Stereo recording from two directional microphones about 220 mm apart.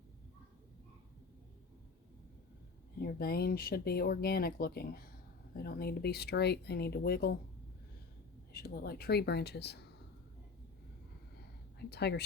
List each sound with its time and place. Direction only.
3.0 s speech: 45° left (ahead or behind)
8.5 s speech: 45° left (ahead or behind)
11.9 s speech: 50° left (ahead or behind)